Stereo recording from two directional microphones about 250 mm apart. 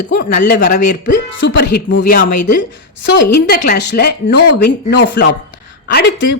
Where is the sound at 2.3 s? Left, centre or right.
Left.